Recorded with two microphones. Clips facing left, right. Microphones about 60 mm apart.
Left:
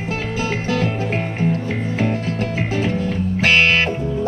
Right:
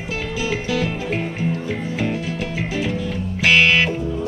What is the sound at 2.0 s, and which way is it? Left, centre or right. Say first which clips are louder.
Music: left 4 dB; left.